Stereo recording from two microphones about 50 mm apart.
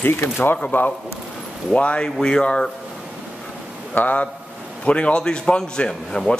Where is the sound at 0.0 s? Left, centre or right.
Left.